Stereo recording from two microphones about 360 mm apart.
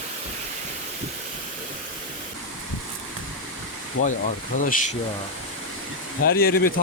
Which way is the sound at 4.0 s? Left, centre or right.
Left.